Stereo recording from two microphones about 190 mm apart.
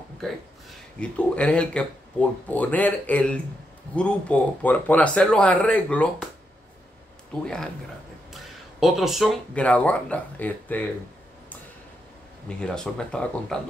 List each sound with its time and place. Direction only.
0.2 s speech: centre (ahead or behind)
7.4 s speech: 5° left (ahead or behind)
12.4 s speech: 5° left (ahead or behind)